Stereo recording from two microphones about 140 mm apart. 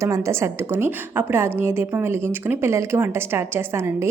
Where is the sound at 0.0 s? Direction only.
20° right (ahead or behind).